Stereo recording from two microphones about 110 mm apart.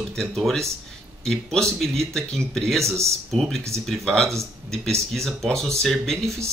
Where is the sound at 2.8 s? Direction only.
25° right (ahead or behind).